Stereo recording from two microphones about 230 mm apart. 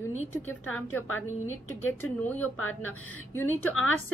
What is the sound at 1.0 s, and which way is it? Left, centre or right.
Speech, left.